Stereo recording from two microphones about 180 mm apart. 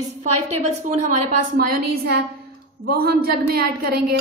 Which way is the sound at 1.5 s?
60° right (ahead or behind).